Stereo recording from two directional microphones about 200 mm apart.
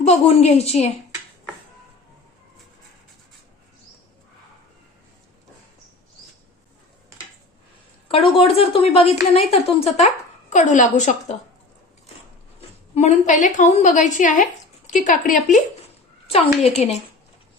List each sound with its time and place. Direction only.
0.0 s a woman's voice: 35° left (ahead or behind)
8.0 s a woman's voice: 25° left (ahead or behind)
12.9 s a woman's voice: 35° left (ahead or behind)